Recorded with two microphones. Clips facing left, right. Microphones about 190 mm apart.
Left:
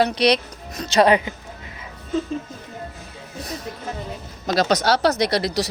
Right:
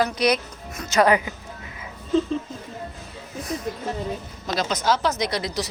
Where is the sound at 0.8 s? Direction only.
30° left (ahead or behind).